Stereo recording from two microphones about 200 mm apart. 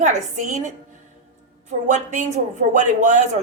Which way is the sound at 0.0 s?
35° right (ahead or behind).